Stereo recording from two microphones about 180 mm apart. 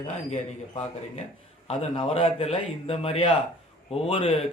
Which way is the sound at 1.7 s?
35° left (ahead or behind).